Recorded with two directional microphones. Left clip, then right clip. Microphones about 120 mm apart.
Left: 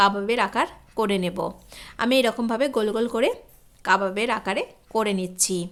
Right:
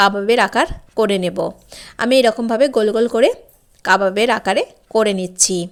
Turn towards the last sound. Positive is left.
turn(degrees=-30)  # may be behind; listen again after turning